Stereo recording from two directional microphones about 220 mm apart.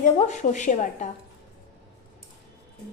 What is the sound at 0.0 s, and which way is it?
A woman's voice, 35° left (ahead or behind).